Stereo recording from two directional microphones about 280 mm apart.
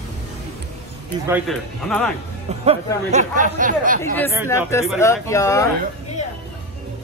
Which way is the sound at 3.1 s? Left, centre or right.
Right.